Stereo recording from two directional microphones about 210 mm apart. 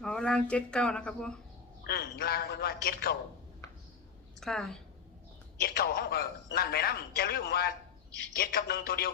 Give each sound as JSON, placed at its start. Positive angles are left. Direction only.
{"t": 0.0, "sound": "speech", "side_deg": 5}
{"t": 1.9, "sound": "a man's voice", "side_deg": 50}
{"t": 4.4, "sound": "a woman's voice", "side_deg": 0}
{"t": 5.5, "sound": "a man's voice", "side_deg": 50}